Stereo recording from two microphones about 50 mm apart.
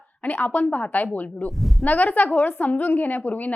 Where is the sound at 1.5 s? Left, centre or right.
Centre.